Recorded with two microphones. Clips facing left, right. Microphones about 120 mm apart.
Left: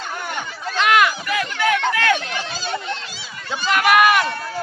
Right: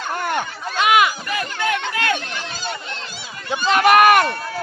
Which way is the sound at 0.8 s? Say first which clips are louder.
Right 1 dB; 15° right (ahead or behind).